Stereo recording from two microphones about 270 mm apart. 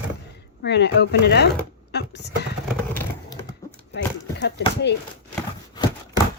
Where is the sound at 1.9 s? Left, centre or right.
Left.